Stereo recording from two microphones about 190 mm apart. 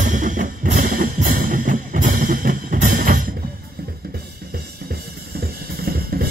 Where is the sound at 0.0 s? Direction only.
40° right (ahead or behind).